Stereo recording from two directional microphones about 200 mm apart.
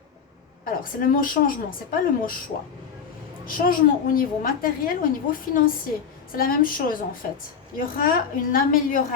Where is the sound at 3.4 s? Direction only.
45° left (ahead or behind).